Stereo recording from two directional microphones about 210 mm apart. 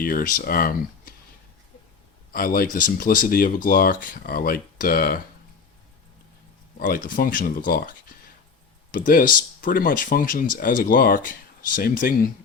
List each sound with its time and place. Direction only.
0.0 s speech: 45° left (ahead or behind)
2.3 s speech: 45° left (ahead or behind)
6.7 s speech: 40° left (ahead or behind)